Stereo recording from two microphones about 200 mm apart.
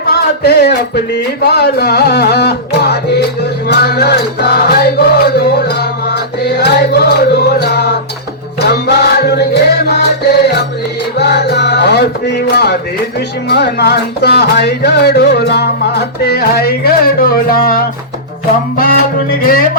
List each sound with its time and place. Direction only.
0.0 s a sound: 50° left (ahead or behind)
1.4 s music: 55° left (ahead or behind)
11.2 s music: 55° left (ahead or behind)